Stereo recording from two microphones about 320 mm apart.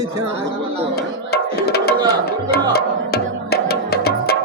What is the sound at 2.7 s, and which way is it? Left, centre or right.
Music, left.